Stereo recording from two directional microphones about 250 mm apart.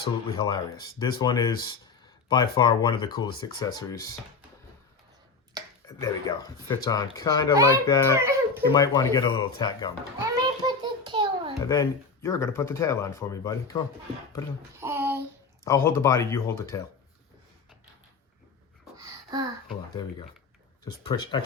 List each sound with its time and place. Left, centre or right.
0.0 s speech: centre
6.0 s speech: centre
8.1 s speech: centre
8.7 s speech: centre
10.2 s a sound: centre
11.6 s speech: centre
14.8 s a sound: centre
15.6 s speech: centre
18.9 s a sound: centre
20.0 s speech: centre